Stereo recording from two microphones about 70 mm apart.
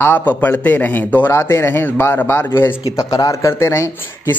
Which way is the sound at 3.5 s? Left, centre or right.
Left.